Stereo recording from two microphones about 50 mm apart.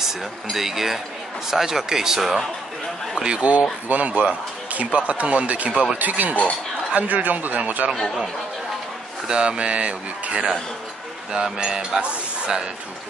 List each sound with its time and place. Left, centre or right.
0.0 s speech: centre
3.9 s speech: right
9.3 s speech: centre